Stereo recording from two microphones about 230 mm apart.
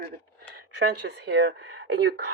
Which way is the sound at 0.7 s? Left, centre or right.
Right.